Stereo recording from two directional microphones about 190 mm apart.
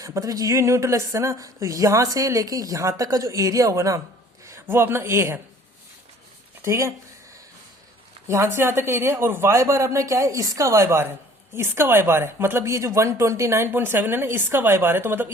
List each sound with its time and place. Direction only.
0.0 s speech: 15° right (ahead or behind)
6.6 s speech: 15° right (ahead or behind)
8.3 s speech: 15° right (ahead or behind)